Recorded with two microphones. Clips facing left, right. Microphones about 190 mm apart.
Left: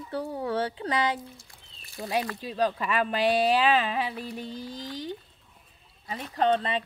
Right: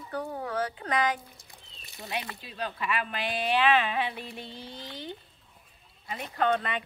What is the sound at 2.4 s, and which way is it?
Speech, 40° left (ahead or behind).